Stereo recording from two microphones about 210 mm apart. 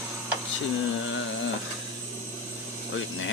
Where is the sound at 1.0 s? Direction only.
65° left (ahead or behind).